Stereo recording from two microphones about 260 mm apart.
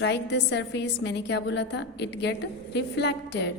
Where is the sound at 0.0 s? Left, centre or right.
Left.